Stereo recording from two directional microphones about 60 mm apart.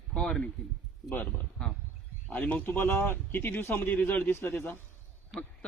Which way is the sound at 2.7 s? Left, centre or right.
Left.